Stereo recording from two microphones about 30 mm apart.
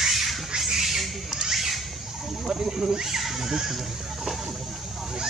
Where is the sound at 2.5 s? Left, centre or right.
Centre.